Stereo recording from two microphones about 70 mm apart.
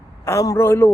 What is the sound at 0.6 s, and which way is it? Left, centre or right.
Speech, left.